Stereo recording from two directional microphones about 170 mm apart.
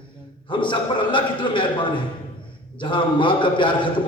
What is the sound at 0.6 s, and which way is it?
A man's voice, 30° left (ahead or behind).